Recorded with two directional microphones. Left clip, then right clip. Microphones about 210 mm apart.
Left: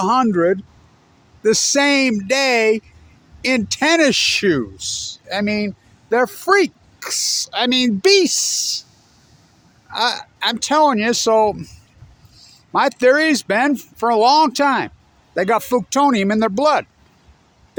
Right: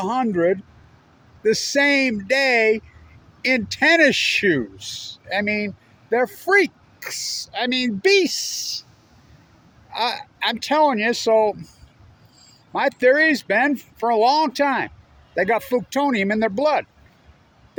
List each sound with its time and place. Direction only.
0.0 s speech: 45° left (ahead or behind)
0.3 s speech: 35° left (ahead or behind)
1.4 s speech: 45° left (ahead or behind)
9.9 s speech: 40° left (ahead or behind)
12.7 s speech: 45° left (ahead or behind)